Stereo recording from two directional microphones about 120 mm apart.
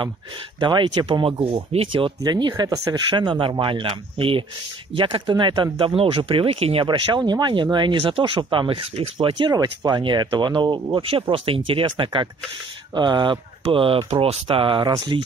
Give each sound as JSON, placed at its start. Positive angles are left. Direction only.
{"t": 0.6, "sound": "speech", "side_deg": -40}
{"t": 1.4, "sound": "speech", "side_deg": -55}